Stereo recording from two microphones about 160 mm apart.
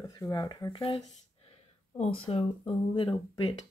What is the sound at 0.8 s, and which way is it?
Speech, 40° left (ahead or behind).